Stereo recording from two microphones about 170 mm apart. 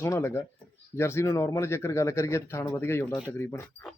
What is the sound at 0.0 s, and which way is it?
Speech, 15° left (ahead or behind).